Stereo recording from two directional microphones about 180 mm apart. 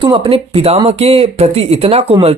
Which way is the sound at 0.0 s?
30° right (ahead or behind).